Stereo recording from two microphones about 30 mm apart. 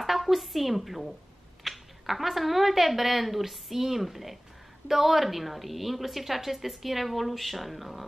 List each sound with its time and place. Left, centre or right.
0.0 s a woman's voice: centre